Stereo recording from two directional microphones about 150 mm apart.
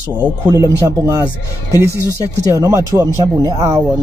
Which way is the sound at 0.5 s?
25° right (ahead or behind).